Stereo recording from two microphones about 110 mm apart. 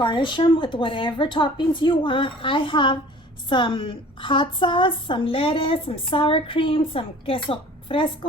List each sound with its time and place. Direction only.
0.0 s a woman's voice: 45° left (ahead or behind)